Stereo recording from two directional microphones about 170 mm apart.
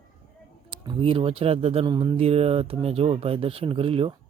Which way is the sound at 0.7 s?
30° right (ahead or behind).